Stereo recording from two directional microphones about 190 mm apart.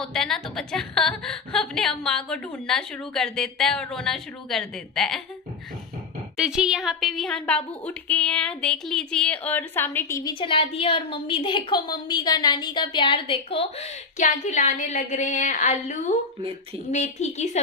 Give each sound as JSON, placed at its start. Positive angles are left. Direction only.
{"t": 0.0, "sound": "a woman's voice", "side_deg": 5}
{"t": 6.3, "sound": "a woman's voice", "side_deg": -5}
{"t": 10.4, "sound": "a woman's voice", "side_deg": 30}